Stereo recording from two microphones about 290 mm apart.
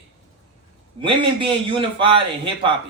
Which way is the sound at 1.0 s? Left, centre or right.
Centre.